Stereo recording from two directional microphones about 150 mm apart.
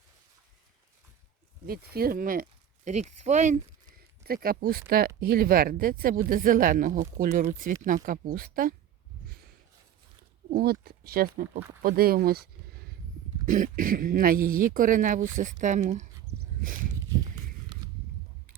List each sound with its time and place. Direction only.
1.6 s speech: 90° right; by 3.6 s 50° right (ahead or behind)
4.3 s speech: 80° right
10.5 s speech: 90° right
13.4 s speech: 60° right (ahead or behind)
16.6 s speech: 65° right (ahead or behind)